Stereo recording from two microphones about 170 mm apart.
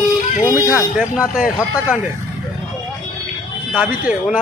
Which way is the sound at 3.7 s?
5° right (ahead or behind).